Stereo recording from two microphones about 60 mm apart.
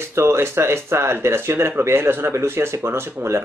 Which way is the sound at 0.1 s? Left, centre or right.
Right.